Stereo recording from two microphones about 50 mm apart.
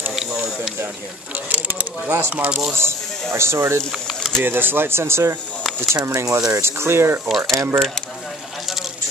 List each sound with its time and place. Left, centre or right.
0.1 s a sound: centre
1.3 s speech: right
2.8 s speech: right
3.9 s a sound: centre
4.4 s speech: right
5.8 s speech: right
7.2 s speech: centre